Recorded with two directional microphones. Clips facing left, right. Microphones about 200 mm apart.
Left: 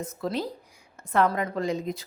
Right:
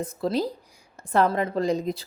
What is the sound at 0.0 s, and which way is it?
A woman's voice, 35° right (ahead or behind).